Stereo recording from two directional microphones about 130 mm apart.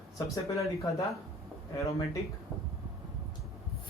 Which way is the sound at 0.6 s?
25° left (ahead or behind).